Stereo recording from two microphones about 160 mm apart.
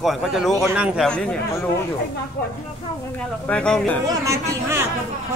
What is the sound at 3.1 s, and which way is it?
Speech, 10° left (ahead or behind).